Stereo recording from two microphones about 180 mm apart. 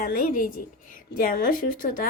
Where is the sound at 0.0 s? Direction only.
50° left (ahead or behind).